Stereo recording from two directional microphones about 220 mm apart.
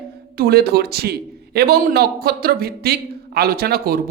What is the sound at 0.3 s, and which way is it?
A man's voice, 45° right (ahead or behind).